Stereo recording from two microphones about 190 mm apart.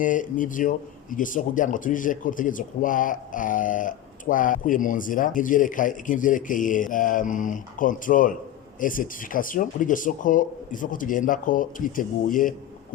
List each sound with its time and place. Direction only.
0.0 s speech: 45° left (ahead or behind)